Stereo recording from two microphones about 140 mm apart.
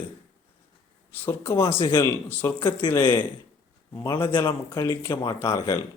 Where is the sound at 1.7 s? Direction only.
35° left (ahead or behind).